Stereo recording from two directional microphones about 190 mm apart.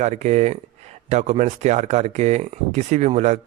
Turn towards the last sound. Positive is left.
turn(degrees=-35)  # may be behind; listen again after turning